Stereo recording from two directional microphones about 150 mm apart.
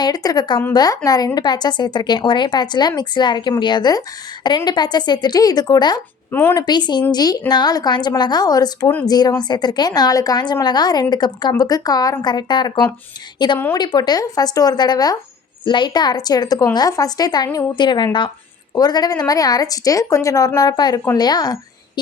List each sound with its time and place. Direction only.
0.0 s speech: 25° left (ahead or behind)
6.3 s a woman's voice: 15° left (ahead or behind)
6.6 s speech: 30° left (ahead or behind)